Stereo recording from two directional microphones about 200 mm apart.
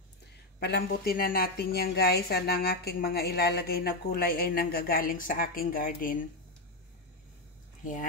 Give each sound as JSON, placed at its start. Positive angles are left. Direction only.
{"t": 0.6, "sound": "a woman's voice", "side_deg": 55}
{"t": 7.8, "sound": "speech", "side_deg": 40}